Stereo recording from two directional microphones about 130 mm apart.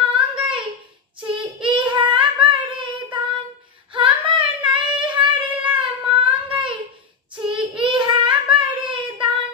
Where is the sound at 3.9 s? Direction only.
40° right (ahead or behind).